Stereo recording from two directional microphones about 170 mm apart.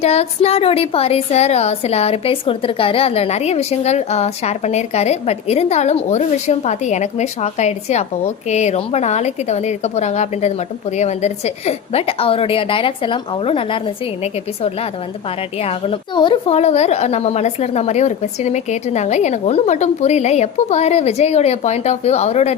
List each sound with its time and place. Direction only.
0.0 s a woman's voice: 40° left (ahead or behind)
15.6 s a woman's voice: 30° left (ahead or behind)